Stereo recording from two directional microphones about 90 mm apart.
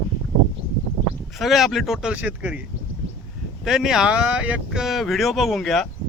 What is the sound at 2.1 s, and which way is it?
Speech, 15° right (ahead or behind).